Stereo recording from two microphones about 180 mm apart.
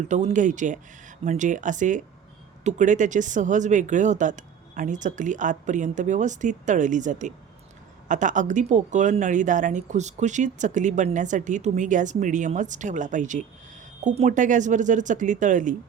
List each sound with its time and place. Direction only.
0.1 s speech: 40° right (ahead or behind)